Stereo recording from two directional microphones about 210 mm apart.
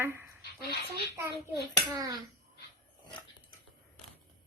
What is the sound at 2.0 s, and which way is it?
Speech, 20° right (ahead or behind).